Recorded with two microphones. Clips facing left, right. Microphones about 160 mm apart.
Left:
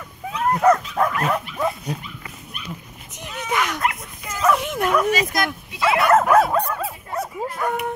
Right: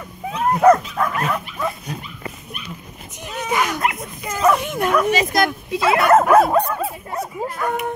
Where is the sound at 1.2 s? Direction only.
30° left (ahead or behind).